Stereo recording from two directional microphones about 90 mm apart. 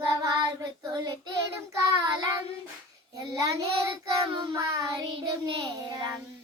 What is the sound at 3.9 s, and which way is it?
Child singing, 70° right (ahead or behind).